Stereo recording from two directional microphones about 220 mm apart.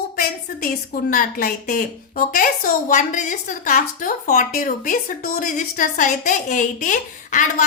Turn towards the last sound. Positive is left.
turn(degrees=35)  # may be behind; listen again after turning